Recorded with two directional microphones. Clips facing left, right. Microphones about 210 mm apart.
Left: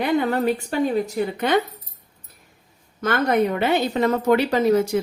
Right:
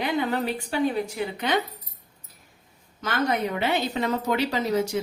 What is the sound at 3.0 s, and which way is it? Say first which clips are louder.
A woman's voice: left 6 dB; 55° left (ahead or behind).